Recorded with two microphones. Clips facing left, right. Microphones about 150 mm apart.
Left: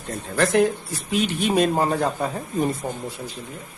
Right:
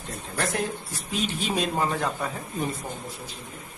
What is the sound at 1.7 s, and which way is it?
Speech, 40° left (ahead or behind).